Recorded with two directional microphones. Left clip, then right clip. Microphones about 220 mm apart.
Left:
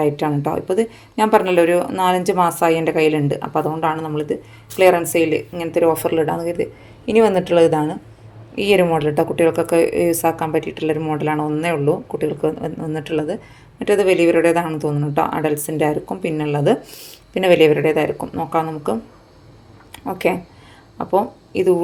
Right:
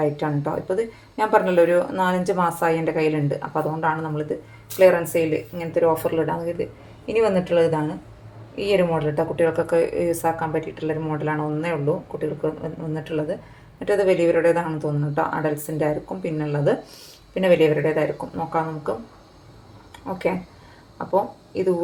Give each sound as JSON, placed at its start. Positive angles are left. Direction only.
{"t": 0.0, "sound": "speech", "side_deg": 40}
{"t": 19.9, "sound": "a sound", "side_deg": 40}
{"t": 21.1, "sound": "speech", "side_deg": 40}